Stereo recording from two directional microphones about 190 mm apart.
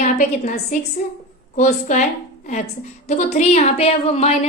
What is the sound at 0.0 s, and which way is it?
A woman's voice, 40° left (ahead or behind).